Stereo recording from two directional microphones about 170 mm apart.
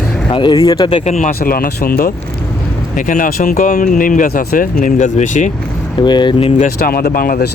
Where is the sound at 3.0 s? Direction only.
50° left (ahead or behind).